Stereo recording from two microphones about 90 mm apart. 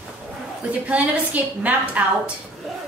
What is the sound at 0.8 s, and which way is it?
A woman's voice, 15° right (ahead or behind).